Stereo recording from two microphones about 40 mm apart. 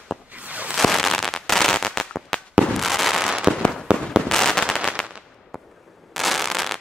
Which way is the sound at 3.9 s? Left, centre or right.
Right.